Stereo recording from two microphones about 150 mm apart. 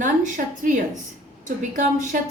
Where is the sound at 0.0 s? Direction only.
60° right (ahead or behind).